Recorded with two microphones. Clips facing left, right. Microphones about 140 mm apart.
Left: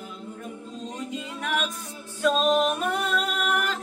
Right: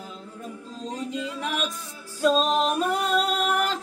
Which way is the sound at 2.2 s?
35° right (ahead or behind).